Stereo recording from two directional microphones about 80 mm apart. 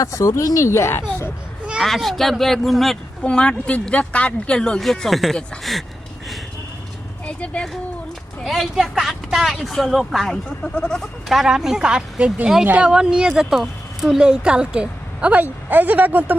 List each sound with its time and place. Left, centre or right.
0.0 s speech: left
1.8 s speech: centre
3.2 s speech: centre
7.3 s speech: centre
8.4 s speech: centre; by 16.4 s right